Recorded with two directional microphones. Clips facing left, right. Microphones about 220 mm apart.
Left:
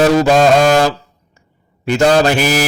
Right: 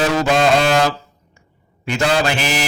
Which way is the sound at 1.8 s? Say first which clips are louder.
Left 7 dB; 40° left (ahead or behind).